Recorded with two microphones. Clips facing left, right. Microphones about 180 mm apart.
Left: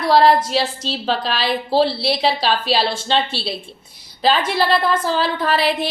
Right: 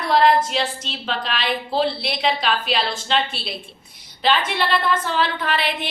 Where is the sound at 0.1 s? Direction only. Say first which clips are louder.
Left 3 dB; 35° left (ahead or behind).